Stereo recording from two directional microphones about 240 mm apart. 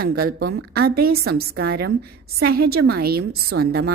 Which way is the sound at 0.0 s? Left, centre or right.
Right.